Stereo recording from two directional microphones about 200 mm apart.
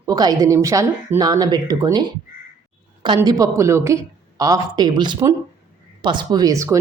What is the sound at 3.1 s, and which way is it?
Speech, 15° right (ahead or behind).